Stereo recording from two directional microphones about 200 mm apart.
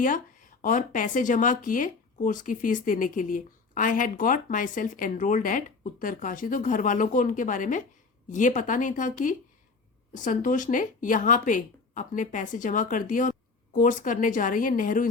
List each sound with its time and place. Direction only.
0.0 s speech: 40° left (ahead or behind)